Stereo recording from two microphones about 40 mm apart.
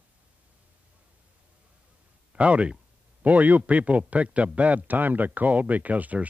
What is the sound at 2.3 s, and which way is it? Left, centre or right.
Speech, right.